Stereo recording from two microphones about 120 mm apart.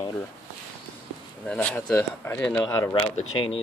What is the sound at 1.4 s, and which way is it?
Speech, 10° left (ahead or behind).